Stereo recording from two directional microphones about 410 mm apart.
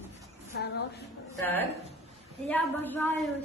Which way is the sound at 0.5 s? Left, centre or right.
Left.